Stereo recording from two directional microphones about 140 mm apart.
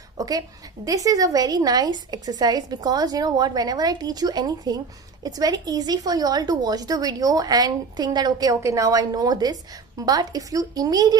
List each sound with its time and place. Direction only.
0.8 s a woman's voice: 25° right (ahead or behind)